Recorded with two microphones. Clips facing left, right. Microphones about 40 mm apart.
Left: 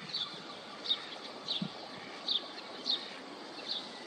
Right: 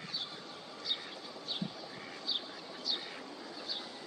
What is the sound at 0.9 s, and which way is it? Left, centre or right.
Bird, left.